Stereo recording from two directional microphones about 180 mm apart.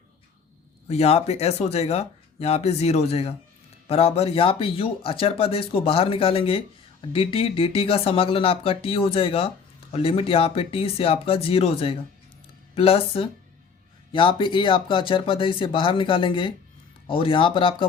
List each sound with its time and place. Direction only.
0.9 s speech: 35° left (ahead or behind)